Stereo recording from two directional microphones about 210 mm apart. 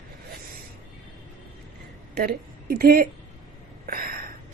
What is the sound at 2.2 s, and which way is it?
Speech, 45° right (ahead or behind).